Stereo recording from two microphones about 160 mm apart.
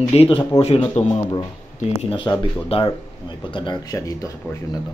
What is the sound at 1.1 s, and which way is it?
A man's voice, 25° left (ahead or behind).